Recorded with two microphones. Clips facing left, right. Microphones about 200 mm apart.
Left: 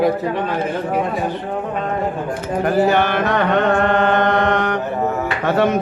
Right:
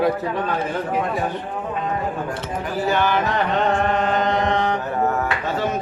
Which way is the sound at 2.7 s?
60° left (ahead or behind).